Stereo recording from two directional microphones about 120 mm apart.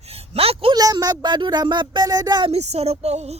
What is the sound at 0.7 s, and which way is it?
Speech, 30° right (ahead or behind).